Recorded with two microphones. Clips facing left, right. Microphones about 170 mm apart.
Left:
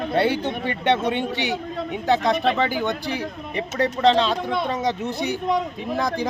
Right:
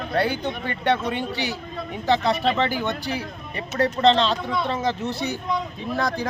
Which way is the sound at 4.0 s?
10° left (ahead or behind).